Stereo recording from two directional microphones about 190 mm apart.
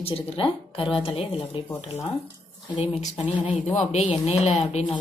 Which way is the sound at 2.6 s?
20° left (ahead or behind).